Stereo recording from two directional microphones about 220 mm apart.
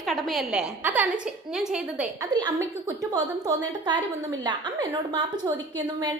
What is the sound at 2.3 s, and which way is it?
A woman's voice, 20° right (ahead or behind).